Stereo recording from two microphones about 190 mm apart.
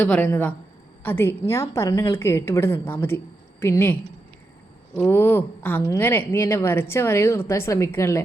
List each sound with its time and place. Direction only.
0.0 s a woman's voice: 10° left (ahead or behind)
4.9 s a woman's voice: 10° left (ahead or behind)